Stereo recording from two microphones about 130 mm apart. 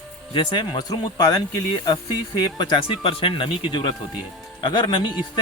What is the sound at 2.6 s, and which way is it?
Speech, 40° left (ahead or behind).